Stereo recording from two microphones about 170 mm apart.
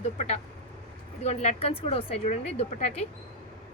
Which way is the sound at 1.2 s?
40° left (ahead or behind).